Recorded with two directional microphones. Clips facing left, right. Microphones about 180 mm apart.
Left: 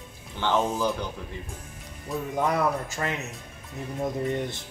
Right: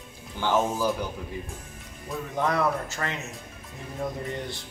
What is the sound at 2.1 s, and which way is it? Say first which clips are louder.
A man's voice: left 1 dB; 10° left (ahead or behind).